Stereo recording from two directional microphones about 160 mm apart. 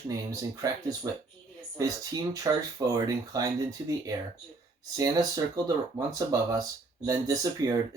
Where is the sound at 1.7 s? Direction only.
20° right (ahead or behind).